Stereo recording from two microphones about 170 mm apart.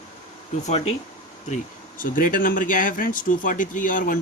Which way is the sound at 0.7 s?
40° left (ahead or behind).